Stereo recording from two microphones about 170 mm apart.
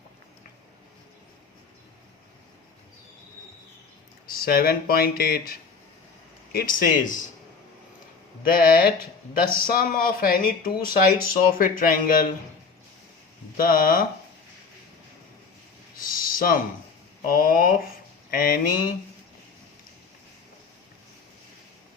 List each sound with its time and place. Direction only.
4.3 s speech: 60° left (ahead or behind)
9.5 s speech: 55° left (ahead or behind)
13.6 s speech: 55° left (ahead or behind)
16.0 s a sound: 55° left (ahead or behind)
17.2 s speech: 55° left (ahead or behind)